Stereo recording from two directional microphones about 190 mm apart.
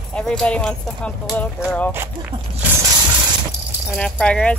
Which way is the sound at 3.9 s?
5° left (ahead or behind).